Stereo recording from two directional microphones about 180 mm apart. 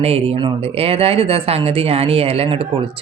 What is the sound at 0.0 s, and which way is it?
Speech, 35° right (ahead or behind).